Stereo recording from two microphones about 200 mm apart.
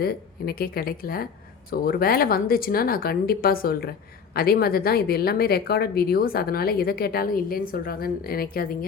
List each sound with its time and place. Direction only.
0.0 s a woman's voice: 50° left (ahead or behind)